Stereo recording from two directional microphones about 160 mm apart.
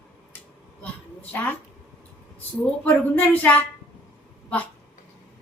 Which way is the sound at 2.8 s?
10° left (ahead or behind).